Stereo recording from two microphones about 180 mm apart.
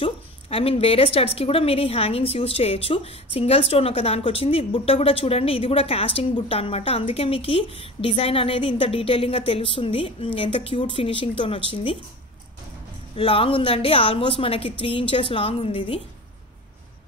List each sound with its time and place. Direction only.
0.0 s a woman's voice: 30° left (ahead or behind)
13.1 s a woman's voice: 30° left (ahead or behind)